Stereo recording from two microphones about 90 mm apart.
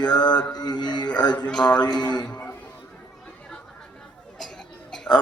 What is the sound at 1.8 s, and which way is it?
Mantra, 50° left (ahead or behind).